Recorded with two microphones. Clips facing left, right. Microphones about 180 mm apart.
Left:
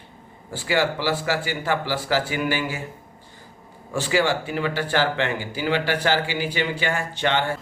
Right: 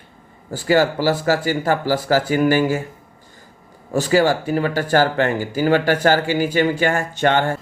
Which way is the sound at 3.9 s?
40° right (ahead or behind).